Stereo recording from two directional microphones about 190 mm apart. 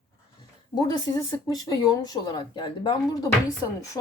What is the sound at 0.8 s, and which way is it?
Speech, 20° left (ahead or behind).